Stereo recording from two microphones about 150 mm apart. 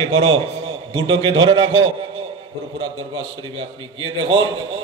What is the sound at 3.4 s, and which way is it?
A man's voice, 35° right (ahead or behind).